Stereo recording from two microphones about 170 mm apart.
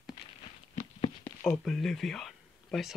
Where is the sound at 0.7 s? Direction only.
35° left (ahead or behind).